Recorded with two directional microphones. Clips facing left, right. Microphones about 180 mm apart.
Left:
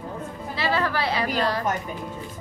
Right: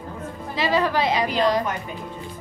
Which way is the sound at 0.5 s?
15° right (ahead or behind).